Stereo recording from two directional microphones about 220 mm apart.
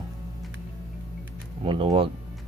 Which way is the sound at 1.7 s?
25° right (ahead or behind).